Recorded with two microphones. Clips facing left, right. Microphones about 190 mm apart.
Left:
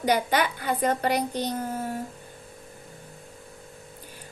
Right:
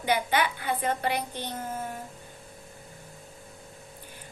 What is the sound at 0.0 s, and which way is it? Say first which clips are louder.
A woman's voice: left 3 dB; 40° left (ahead or behind).